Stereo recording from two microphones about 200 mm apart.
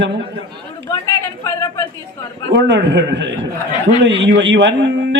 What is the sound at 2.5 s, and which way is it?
A man's voice, 60° right (ahead or behind).